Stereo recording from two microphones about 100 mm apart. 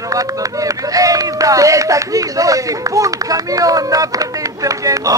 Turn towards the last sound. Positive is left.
turn(degrees=-35)  # may be behind; listen again after turning